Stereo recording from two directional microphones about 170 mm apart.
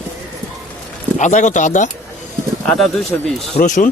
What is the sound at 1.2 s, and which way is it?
Speech, 45° left (ahead or behind).